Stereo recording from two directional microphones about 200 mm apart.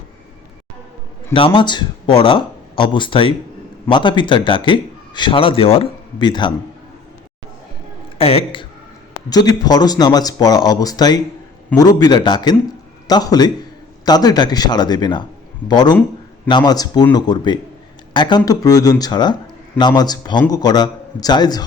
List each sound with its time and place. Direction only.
1.3 s a man's voice: 25° left (ahead or behind)
8.2 s a woman's voice: 30° left (ahead or behind)